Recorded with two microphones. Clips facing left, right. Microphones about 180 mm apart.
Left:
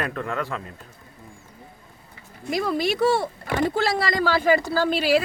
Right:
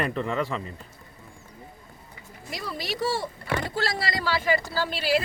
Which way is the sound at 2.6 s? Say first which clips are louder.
Left 8 dB; 55° left (ahead or behind).